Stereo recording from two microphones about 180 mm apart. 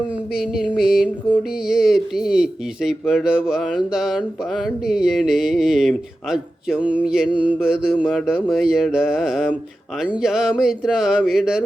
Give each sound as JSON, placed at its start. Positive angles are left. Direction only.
{"t": 0.8, "sound": "mantra", "side_deg": -5}